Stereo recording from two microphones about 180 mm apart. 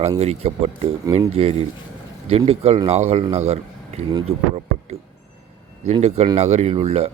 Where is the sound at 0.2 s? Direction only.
35° right (ahead or behind).